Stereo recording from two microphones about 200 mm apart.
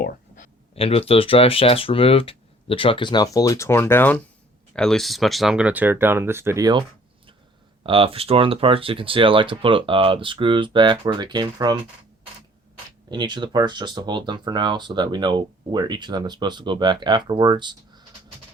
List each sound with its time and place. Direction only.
0.0 s a sound: 40° left (ahead or behind)
0.8 s speech: 30° left (ahead or behind); by 6.8 s 20° right (ahead or behind)
7.9 s speech: 25° right (ahead or behind)
13.1 s speech: 20° right (ahead or behind)